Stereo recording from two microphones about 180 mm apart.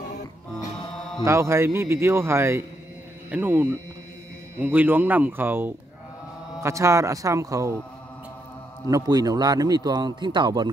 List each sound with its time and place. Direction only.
1.2 s a man's voice: 15° right (ahead or behind)
8.9 s speech: 20° right (ahead or behind)